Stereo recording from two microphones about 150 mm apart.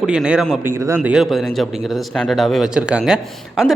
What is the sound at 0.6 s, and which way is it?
A man's voice, 15° right (ahead or behind).